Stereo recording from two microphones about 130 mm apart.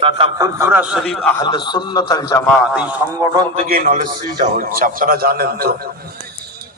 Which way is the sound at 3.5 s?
90° right.